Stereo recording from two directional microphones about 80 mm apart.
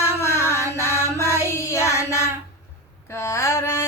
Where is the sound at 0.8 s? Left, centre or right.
Left.